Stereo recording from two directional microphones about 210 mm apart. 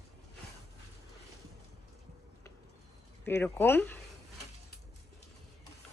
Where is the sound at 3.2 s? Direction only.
10° left (ahead or behind).